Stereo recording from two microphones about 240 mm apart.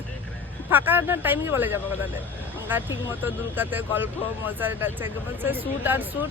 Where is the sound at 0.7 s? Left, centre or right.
Centre.